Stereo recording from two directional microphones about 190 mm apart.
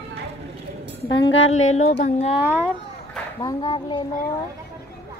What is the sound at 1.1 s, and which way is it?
Speech, 75° left (ahead or behind).